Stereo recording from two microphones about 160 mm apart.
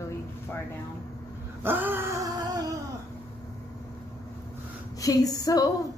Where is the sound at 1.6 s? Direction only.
10° right (ahead or behind).